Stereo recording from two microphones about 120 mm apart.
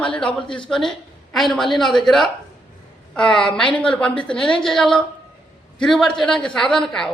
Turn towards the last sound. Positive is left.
turn(degrees=5)  # may be behind; listen again after turning